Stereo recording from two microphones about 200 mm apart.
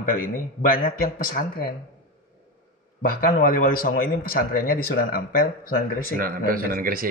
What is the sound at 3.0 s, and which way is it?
Speech, 45° left (ahead or behind).